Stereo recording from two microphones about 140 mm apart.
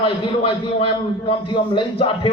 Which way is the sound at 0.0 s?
40° left (ahead or behind).